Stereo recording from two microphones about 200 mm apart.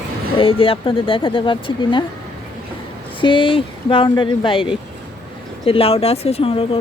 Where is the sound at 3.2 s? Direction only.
25° left (ahead or behind).